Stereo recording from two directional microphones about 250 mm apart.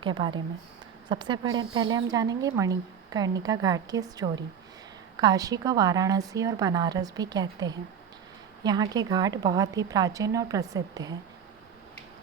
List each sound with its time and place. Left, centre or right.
0.0 s a woman's voice: centre